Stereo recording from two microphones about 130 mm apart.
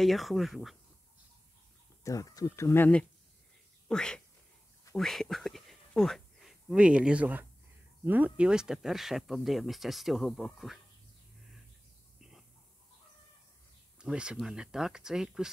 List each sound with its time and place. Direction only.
0.0 s speech: centre (ahead or behind)
2.0 s speech: 25° left (ahead or behind); by 10.8 s centre (ahead or behind)
12.2 s a sound: 5° right (ahead or behind)
13.9 s speech: 5° right (ahead or behind)